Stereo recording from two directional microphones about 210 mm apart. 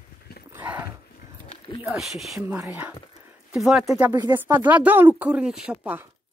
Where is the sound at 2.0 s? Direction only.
Centre (ahead or behind).